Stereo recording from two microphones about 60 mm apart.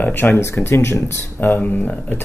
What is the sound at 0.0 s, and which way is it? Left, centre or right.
Speech, left.